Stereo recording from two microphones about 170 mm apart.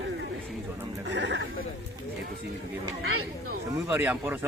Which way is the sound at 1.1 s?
90° right.